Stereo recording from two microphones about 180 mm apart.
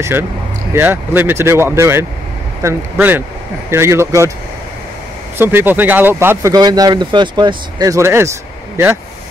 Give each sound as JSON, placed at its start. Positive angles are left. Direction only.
{"t": 0.7, "sound": "speech", "side_deg": -10}
{"t": 5.4, "sound": "speech", "side_deg": -10}